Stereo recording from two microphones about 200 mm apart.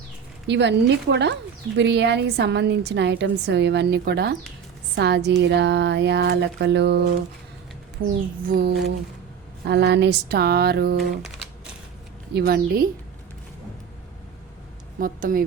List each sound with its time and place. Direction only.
0.4 s a woman's voice: 60° right (ahead or behind)
8.0 s speech: 50° right (ahead or behind)
12.3 s speech: 55° right (ahead or behind)
14.9 s speech: 45° right (ahead or behind)